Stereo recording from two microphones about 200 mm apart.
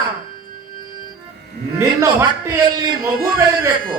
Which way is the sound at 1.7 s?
15° right (ahead or behind).